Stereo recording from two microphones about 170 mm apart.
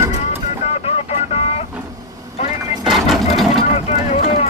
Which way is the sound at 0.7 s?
40° left (ahead or behind).